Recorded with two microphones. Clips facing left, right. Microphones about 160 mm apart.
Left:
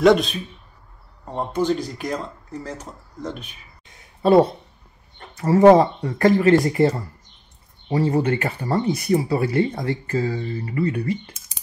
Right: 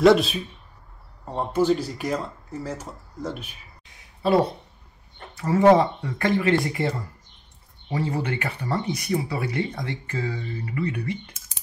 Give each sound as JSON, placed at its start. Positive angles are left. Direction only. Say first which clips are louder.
{"t": 0.0, "sound": "speech", "louder": "left 1 dB", "side_deg": 0}
{"t": 1.5, "sound": "speech", "louder": "right 1 dB", "side_deg": -5}
{"t": 5.3, "sound": "speech", "louder": "left 4 dB", "side_deg": 40}